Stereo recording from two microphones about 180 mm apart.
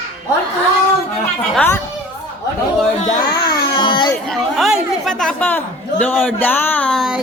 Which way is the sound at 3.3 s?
25° left (ahead or behind).